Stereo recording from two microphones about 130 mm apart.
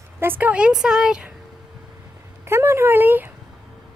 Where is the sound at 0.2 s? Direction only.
15° right (ahead or behind).